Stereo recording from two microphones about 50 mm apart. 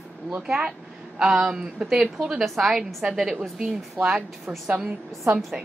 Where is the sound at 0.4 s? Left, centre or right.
Centre.